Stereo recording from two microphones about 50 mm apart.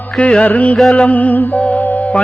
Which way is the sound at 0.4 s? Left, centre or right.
Left.